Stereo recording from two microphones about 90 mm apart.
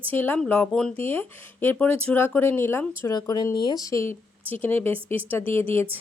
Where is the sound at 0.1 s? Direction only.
20° left (ahead or behind).